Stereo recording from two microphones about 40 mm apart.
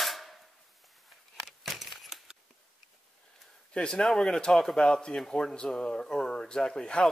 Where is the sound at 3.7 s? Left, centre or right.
Left.